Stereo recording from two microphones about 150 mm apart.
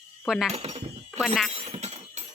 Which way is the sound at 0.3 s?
Centre (ahead or behind).